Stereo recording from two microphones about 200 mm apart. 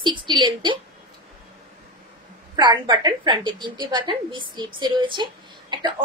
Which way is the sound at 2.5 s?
20° right (ahead or behind).